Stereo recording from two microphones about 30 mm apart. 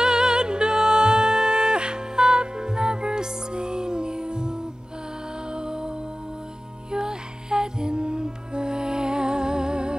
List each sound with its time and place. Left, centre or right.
0.0 s music: right